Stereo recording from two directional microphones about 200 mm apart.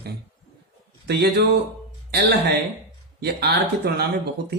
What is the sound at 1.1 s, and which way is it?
Speech, 55° right (ahead or behind).